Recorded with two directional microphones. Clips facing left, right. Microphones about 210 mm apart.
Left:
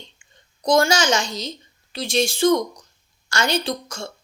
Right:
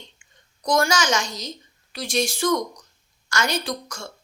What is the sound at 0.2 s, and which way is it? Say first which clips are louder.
A woman's voice: left 4 dB; 30° left (ahead or behind).